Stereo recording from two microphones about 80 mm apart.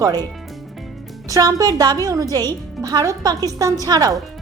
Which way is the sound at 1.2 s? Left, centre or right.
Right.